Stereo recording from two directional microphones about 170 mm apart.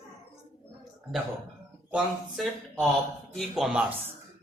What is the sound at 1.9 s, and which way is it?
Speech, 5° right (ahead or behind).